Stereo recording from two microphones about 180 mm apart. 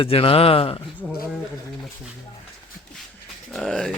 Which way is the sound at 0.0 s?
30° left (ahead or behind).